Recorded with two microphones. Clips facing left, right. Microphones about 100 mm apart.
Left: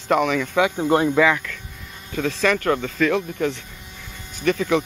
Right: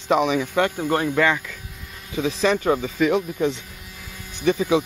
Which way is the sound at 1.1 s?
Centre (ahead or behind).